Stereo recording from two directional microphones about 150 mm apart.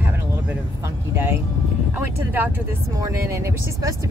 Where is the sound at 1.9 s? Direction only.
10° right (ahead or behind).